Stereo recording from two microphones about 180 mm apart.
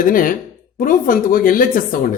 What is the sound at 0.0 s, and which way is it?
Speech, 50° left (ahead or behind).